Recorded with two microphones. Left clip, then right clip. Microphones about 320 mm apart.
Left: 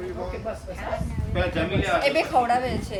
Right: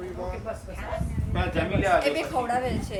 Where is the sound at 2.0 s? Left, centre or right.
Centre.